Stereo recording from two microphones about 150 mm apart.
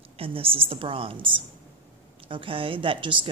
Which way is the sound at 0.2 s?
40° right (ahead or behind).